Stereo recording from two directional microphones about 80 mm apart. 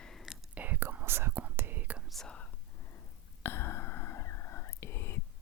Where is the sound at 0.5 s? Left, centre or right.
Right.